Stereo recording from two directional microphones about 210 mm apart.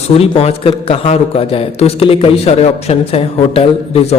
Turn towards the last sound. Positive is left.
turn(degrees=25)  # may be behind; listen again after turning